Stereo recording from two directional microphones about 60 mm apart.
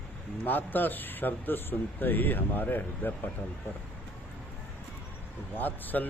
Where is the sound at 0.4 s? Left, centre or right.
Left.